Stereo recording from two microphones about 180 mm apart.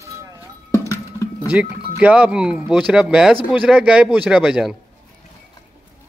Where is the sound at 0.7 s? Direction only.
15° right (ahead or behind).